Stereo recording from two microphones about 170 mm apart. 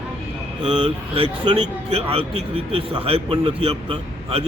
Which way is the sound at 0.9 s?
35° right (ahead or behind).